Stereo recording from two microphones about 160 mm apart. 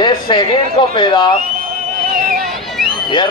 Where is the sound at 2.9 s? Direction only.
30° left (ahead or behind).